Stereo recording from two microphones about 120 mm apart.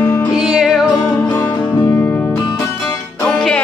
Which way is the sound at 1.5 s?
25° left (ahead or behind).